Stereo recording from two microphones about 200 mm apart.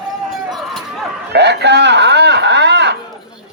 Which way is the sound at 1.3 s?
55° right (ahead or behind).